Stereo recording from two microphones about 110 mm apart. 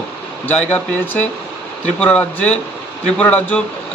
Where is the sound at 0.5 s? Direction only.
15° left (ahead or behind).